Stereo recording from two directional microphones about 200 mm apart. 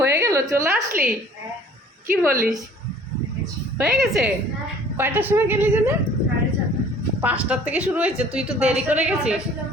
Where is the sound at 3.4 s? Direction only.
Centre (ahead or behind).